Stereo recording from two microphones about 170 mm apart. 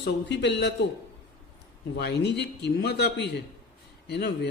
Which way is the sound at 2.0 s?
75° left (ahead or behind).